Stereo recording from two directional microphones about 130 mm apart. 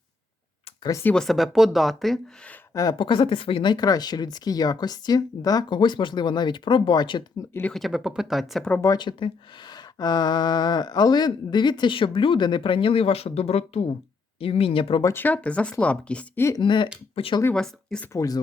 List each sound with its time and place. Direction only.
0.8 s speech: 25° left (ahead or behind)
1.0 s speech: 5° left (ahead or behind)
3.0 s speech: 40° left (ahead or behind)
7.7 s speech: centre (ahead or behind)
8.7 s speech: 25° left (ahead or behind)
9.0 s speech: 40° left (ahead or behind)
15.0 s speech: 15° left (ahead or behind)
16.6 s speech: 40° left (ahead or behind)
17.5 s speech: 5° left (ahead or behind)
18.1 s speech: 25° left (ahead or behind)